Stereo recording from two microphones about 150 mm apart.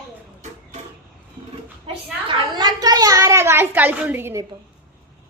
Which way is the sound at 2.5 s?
25° right (ahead or behind).